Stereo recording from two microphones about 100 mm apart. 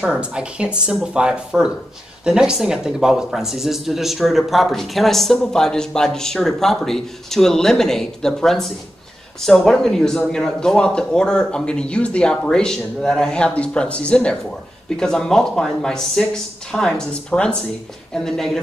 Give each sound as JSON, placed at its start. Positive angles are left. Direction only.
{"t": 0.0, "sound": "a man's voice", "side_deg": -10}